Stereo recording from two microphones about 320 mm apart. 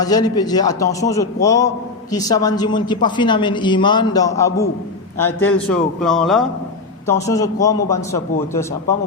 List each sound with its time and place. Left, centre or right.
0.0 s a man's voice: centre